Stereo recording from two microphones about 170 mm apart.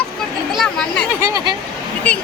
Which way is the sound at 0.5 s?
5° left (ahead or behind).